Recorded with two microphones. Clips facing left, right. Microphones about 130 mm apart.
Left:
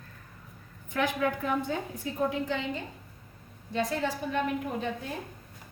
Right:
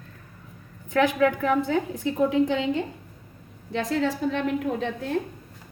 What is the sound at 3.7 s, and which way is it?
A woman's voice, 90° right.